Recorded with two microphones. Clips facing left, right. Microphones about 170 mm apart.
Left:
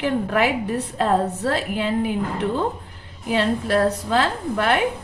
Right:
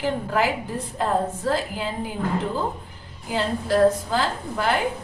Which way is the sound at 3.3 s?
70° left (ahead or behind).